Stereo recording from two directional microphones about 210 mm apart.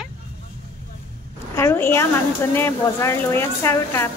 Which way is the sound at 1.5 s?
10° left (ahead or behind).